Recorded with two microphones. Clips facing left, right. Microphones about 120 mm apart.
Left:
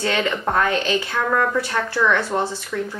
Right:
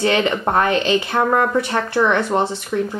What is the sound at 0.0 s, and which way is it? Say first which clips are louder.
A woman's voice: right 4 dB; 20° right (ahead or behind).